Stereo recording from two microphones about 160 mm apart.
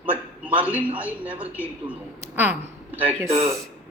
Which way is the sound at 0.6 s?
10° right (ahead or behind).